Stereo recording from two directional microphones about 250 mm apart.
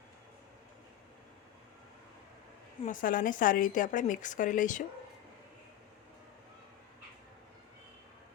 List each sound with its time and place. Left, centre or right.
2.8 s a woman's voice: left